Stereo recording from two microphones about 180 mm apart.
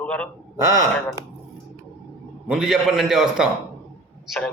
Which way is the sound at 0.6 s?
15° right (ahead or behind).